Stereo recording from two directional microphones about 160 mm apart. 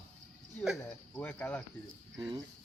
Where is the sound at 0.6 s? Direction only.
Centre (ahead or behind).